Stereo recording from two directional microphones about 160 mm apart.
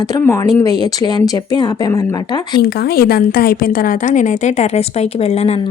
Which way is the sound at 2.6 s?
75° left (ahead or behind).